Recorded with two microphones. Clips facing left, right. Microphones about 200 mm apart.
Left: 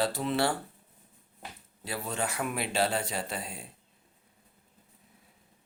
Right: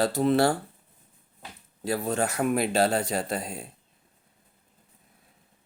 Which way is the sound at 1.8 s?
45° right (ahead or behind).